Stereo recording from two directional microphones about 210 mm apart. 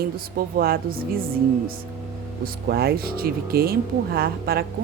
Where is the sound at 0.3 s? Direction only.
45° right (ahead or behind).